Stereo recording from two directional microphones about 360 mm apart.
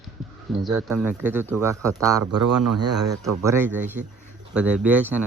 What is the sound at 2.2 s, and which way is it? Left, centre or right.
Speech, right.